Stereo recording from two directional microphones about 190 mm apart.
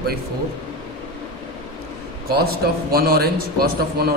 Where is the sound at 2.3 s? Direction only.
55° right (ahead or behind).